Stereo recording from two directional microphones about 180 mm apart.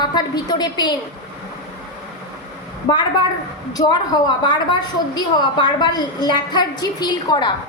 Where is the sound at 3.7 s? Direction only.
20° left (ahead or behind).